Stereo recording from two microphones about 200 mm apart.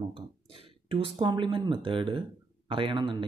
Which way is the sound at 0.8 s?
25° right (ahead or behind).